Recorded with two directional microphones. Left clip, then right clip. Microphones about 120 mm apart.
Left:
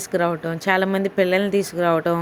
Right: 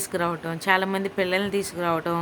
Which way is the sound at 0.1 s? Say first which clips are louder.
Left 6 dB; 25° left (ahead or behind).